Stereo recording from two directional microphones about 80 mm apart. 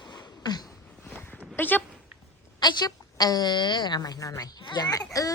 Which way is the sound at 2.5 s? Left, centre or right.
Left.